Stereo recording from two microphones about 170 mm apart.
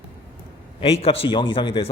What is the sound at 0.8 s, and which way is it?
A man's voice, 35° left (ahead or behind).